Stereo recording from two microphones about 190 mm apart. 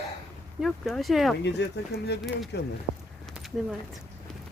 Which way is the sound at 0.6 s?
Centre (ahead or behind).